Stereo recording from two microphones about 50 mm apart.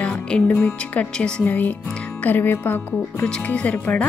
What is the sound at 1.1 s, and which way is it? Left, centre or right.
Speech, centre.